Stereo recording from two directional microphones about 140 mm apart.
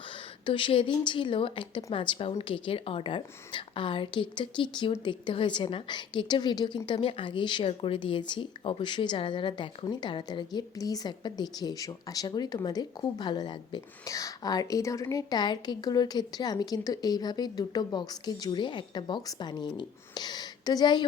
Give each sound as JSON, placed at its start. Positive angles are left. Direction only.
{"t": 0.4, "sound": "a woman's voice", "side_deg": 35}